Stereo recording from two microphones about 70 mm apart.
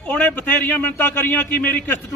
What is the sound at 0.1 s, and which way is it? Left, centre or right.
A man's voice, left.